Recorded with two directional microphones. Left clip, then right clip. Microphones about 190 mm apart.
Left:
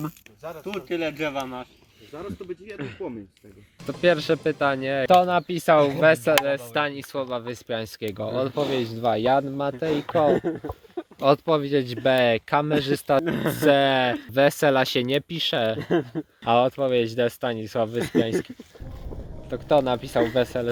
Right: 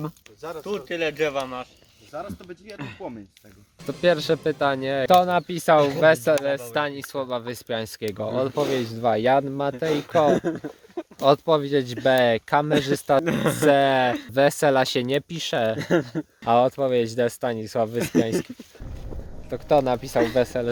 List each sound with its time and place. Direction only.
0.4 s speech: 30° right (ahead or behind)
3.8 s speech: centre (ahead or behind)
10.2 s speech: 20° right (ahead or behind)
11.2 s speech: centre (ahead or behind)
13.2 s speech: 30° right (ahead or behind)
13.7 s speech: centre (ahead or behind)
15.8 s speech: 30° right (ahead or behind)
16.4 s speech: 5° right (ahead or behind)
19.5 s speech: 5° right (ahead or behind)